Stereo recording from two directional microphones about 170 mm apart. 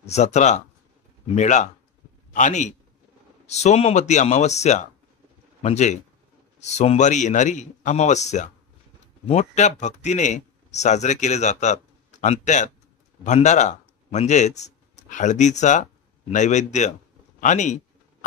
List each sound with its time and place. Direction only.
0.0 s a man's voice: 40° left (ahead or behind)